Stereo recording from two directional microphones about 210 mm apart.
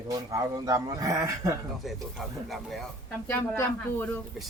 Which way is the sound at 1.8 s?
Centre (ahead or behind).